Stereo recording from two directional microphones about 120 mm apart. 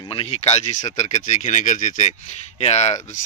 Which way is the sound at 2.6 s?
65° left (ahead or behind).